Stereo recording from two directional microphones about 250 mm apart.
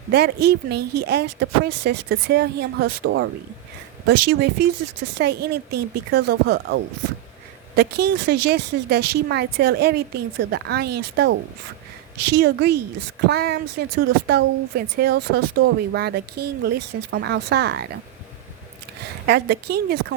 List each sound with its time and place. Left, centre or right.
0.4 s a woman's voice: right
4.3 s a woman's voice: right
7.8 s a woman's voice: right
19.2 s a woman's voice: right